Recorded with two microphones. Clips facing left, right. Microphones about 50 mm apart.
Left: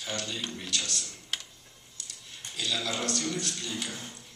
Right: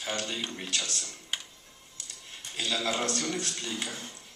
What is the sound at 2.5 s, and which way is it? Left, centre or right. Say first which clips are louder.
Speech: right 2 dB; right.